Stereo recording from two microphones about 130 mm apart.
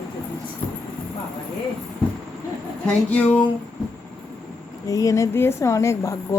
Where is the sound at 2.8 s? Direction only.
10° left (ahead or behind).